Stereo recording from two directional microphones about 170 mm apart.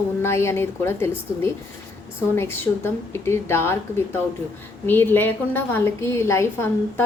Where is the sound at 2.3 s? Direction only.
15° left (ahead or behind).